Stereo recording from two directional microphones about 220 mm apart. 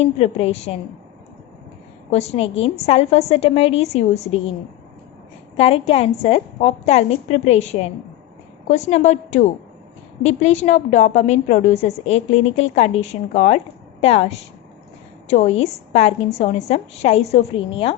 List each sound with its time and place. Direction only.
0.0 s a woman's voice: 30° left (ahead or behind)
2.0 s a woman's voice: 30° left (ahead or behind)
5.5 s a woman's voice: 25° left (ahead or behind)